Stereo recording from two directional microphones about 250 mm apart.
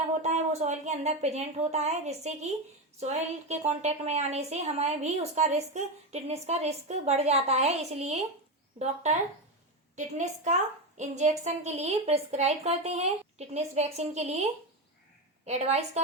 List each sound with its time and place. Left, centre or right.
0.2 s a woman's voice: right
9.9 s a woman's voice: right
15.4 s a woman's voice: right